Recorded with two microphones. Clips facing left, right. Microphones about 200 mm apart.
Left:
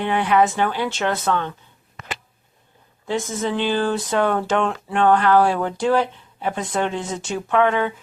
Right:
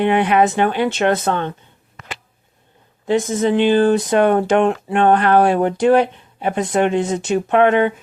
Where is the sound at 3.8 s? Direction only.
15° right (ahead or behind).